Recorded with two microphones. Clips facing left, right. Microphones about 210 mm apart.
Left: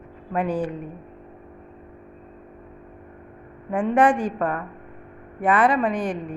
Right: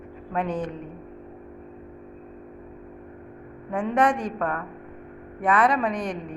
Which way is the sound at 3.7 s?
5° left (ahead or behind).